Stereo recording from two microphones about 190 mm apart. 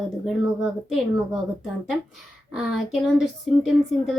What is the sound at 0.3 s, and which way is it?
Speech, centre (ahead or behind).